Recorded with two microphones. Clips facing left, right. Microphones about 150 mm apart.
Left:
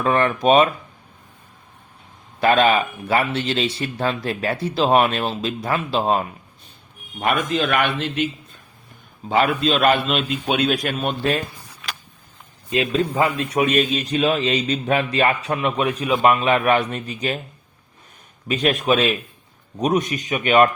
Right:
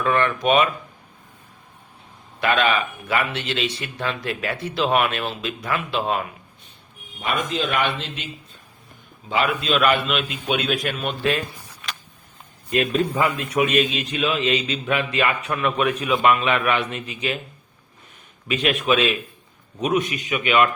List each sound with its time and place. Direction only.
0.0 s speech: 35° left (ahead or behind)
2.4 s speech: 35° left (ahead or behind)
7.2 s speech: 55° left (ahead or behind)
9.3 s speech: 40° left (ahead or behind)
12.7 s speech: 25° left (ahead or behind)
18.4 s speech: 40° left (ahead or behind)